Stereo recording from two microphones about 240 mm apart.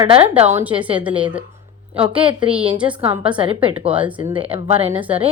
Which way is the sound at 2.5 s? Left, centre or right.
Centre.